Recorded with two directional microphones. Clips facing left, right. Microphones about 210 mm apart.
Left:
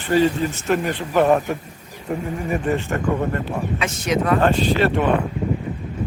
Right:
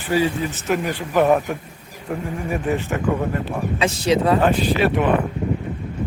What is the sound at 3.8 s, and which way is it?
Speech, 30° right (ahead or behind).